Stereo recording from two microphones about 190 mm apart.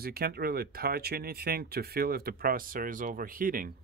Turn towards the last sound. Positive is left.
turn(degrees=-45)  # may be behind; listen again after turning